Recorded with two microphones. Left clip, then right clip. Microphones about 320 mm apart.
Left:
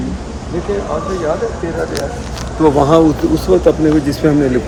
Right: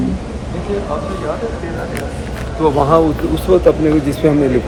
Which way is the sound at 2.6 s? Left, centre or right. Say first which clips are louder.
Left 2 dB; left.